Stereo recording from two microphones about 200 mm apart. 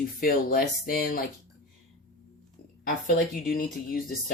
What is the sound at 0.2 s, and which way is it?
Speech, 50° left (ahead or behind).